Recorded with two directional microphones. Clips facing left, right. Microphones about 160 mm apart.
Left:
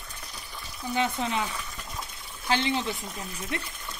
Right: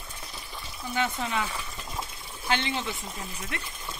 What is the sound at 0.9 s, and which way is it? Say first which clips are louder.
Speech: left 1 dB; 25° left (ahead or behind).